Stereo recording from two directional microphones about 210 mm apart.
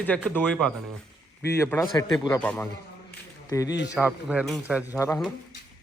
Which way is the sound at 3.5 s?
15° left (ahead or behind).